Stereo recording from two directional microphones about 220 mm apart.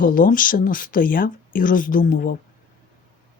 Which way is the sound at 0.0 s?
40° left (ahead or behind).